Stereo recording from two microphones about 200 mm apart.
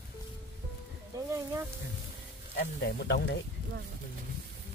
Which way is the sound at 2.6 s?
55° left (ahead or behind).